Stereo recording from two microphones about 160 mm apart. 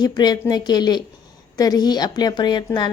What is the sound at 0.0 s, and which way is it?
A woman's voice, 25° left (ahead or behind).